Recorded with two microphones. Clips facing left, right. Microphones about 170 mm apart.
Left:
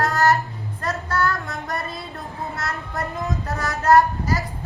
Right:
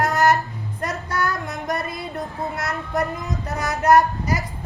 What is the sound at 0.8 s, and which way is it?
A woman's voice, 15° right (ahead or behind).